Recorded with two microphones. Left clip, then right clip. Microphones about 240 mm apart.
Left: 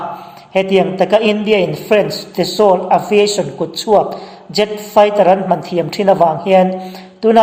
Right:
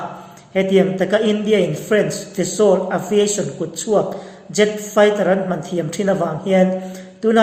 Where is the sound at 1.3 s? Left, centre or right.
Left.